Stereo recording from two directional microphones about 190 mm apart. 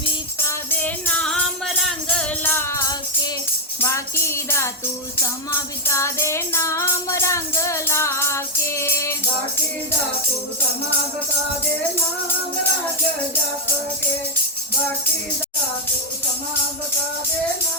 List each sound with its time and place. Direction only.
0.7 s music: 10° left (ahead or behind)